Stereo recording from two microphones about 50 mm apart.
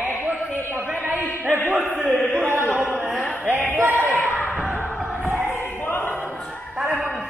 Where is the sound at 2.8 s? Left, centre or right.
Right.